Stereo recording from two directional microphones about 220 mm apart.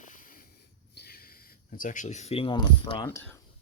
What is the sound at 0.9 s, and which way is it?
Speech, 45° left (ahead or behind).